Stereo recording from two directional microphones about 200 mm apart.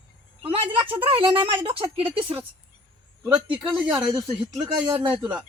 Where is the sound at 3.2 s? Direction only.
10° right (ahead or behind).